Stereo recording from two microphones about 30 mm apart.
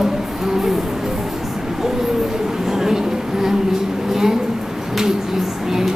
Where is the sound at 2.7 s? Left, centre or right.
Centre.